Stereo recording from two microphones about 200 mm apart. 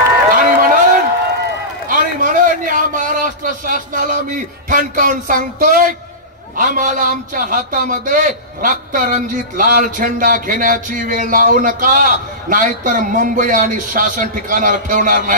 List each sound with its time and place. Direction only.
0.3 s run: 45° right (ahead or behind)
1.9 s a sound: 40° right (ahead or behind)
6.5 s a man's voice: 45° right (ahead or behind)